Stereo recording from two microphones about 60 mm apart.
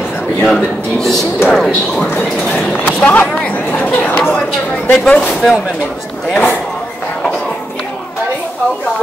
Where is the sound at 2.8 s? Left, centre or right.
Left.